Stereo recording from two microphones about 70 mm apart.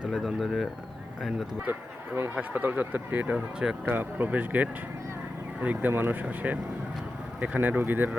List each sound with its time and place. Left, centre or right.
0.1 s speech: centre
1.7 s speech: right
3.3 s speech: centre
3.8 s speech: right
5.9 s speech: right